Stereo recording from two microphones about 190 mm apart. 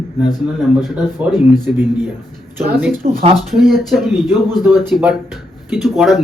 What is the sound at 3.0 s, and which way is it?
Speech, 35° right (ahead or behind).